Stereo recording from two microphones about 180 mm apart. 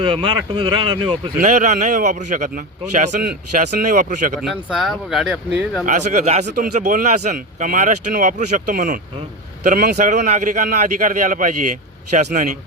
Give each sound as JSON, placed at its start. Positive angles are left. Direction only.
{"t": 0.0, "sound": "speech", "side_deg": -30}
{"t": 1.4, "sound": "speech", "side_deg": -45}
{"t": 4.4, "sound": "speech", "side_deg": 0}
{"t": 5.8, "sound": "speech", "side_deg": -45}